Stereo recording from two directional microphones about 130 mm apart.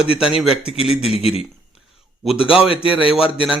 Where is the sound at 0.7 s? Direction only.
50° left (ahead or behind).